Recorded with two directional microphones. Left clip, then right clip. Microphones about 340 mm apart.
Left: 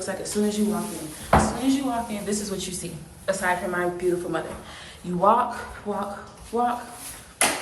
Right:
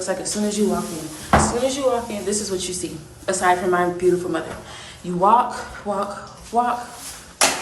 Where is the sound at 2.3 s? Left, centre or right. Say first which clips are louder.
Right 5 dB; centre.